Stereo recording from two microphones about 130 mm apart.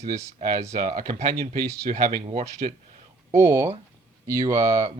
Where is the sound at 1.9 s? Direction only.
90° right.